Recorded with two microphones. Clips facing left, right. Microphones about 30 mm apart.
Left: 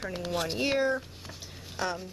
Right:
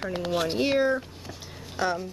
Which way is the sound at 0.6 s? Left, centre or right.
Centre.